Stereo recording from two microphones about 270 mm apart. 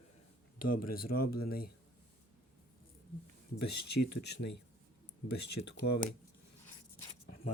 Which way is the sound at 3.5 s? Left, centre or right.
Left.